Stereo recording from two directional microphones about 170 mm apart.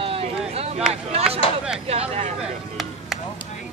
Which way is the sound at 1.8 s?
35° right (ahead or behind).